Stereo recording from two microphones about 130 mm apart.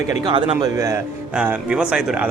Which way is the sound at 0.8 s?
20° right (ahead or behind).